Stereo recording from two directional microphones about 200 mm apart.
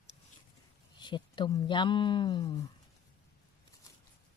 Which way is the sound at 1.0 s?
25° left (ahead or behind).